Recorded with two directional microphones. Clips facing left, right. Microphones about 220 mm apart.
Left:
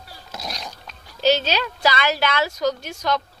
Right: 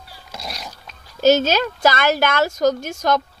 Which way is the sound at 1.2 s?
45° right (ahead or behind).